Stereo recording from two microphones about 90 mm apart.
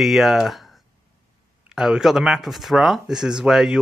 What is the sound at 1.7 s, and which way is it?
Speech, 5° right (ahead or behind).